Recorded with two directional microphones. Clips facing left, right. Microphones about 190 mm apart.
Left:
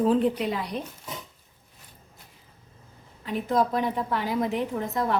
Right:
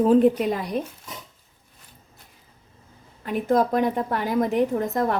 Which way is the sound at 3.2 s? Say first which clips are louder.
Right 4 dB; 50° right (ahead or behind).